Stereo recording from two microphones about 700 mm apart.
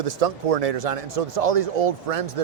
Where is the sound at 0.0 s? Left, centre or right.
Right.